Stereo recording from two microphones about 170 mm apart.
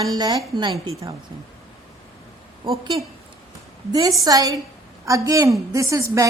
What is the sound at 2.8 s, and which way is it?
A woman's voice, 25° right (ahead or behind).